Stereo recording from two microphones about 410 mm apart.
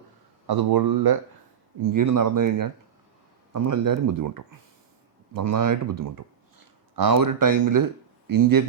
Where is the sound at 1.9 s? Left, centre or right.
Right.